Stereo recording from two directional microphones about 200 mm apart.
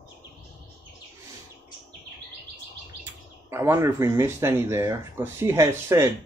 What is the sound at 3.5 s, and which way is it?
Speech, 15° right (ahead or behind).